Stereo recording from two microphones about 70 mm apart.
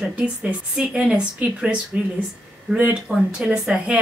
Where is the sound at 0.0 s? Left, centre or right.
Centre.